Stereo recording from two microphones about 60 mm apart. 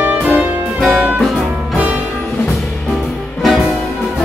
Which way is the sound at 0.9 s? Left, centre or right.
Right.